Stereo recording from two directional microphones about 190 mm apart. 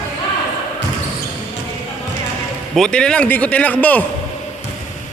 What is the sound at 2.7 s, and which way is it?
Speech, 5° left (ahead or behind).